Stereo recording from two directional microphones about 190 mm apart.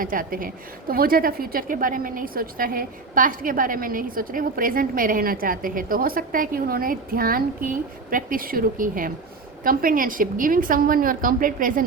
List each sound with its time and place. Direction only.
0.0 s a woman's voice: 45° right (ahead or behind)